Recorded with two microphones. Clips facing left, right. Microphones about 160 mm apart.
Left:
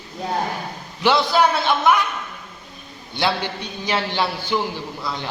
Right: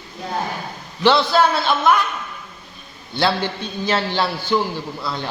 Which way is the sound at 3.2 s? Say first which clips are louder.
Right 2 dB; 15° left (ahead or behind).